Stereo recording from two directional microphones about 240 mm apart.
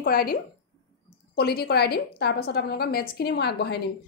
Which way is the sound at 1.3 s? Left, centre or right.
Left.